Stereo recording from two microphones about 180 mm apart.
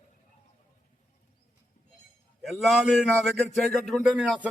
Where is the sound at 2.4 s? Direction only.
Centre (ahead or behind).